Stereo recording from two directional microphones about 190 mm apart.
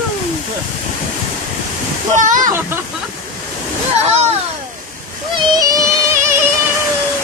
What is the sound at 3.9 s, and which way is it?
Speech, 30° right (ahead or behind).